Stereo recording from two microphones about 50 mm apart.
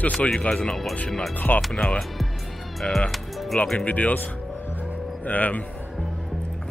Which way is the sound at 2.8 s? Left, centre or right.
Centre.